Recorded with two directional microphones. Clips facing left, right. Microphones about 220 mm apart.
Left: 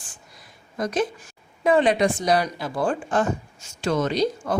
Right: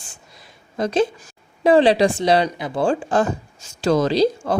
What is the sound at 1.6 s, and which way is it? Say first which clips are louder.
Speech: right 5 dB; 30° right (ahead or behind).